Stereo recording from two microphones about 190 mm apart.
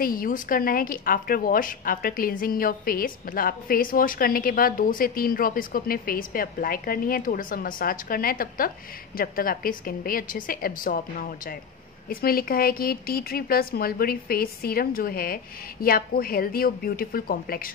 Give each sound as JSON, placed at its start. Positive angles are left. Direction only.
{"t": 0.0, "sound": "a woman's voice", "side_deg": 45}